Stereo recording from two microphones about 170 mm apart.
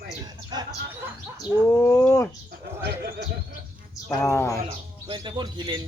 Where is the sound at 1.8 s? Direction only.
10° left (ahead or behind).